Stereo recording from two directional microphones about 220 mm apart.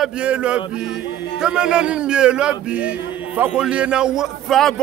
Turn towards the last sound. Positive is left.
turn(degrees=0)  # may be behind; listen again after turning